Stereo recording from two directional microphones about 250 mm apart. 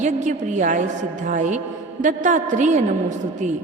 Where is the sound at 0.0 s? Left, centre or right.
Right.